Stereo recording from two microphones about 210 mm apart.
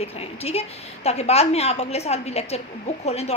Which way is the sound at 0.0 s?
30° left (ahead or behind).